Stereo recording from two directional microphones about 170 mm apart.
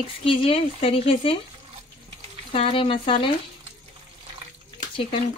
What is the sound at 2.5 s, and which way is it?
Speech, 30° left (ahead or behind).